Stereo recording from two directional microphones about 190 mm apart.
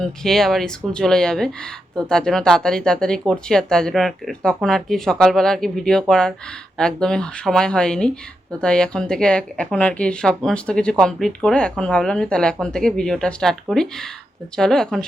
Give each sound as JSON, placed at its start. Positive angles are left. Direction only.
{"t": 0.0, "sound": "speech", "side_deg": 0}